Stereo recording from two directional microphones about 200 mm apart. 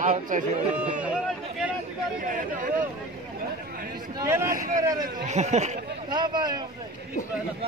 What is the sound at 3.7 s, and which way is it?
Chatter, 45° right (ahead or behind).